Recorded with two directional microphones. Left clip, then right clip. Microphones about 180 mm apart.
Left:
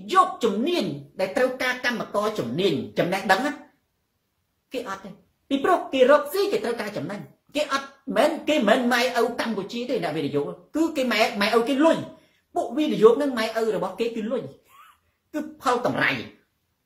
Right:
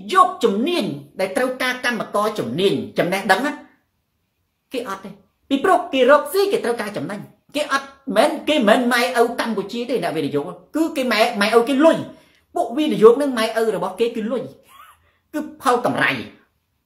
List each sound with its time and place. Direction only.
0.0 s a woman's voice: 10° right (ahead or behind)
4.6 s a woman's voice: 10° right (ahead or behind)